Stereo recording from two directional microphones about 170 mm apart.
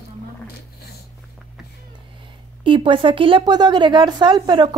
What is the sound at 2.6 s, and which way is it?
A woman's voice, 30° right (ahead or behind).